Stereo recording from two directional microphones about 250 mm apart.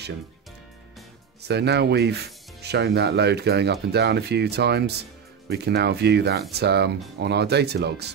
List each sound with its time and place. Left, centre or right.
1.5 s speech: right